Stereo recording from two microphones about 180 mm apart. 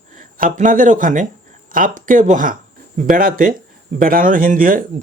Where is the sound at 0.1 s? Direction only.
50° right (ahead or behind).